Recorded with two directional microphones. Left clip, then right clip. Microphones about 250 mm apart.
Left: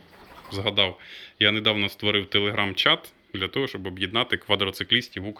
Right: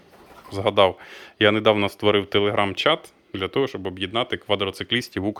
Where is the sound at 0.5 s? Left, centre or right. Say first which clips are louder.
Right 6 dB; centre.